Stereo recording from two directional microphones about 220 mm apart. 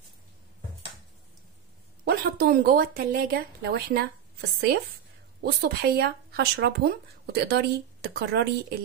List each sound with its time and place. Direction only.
2.0 s a woman's voice: 40° right (ahead or behind)